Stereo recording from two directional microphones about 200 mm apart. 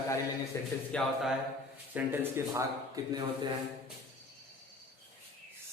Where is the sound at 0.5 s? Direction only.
15° left (ahead or behind).